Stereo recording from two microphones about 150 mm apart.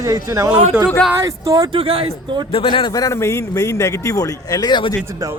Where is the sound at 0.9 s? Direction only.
5° left (ahead or behind).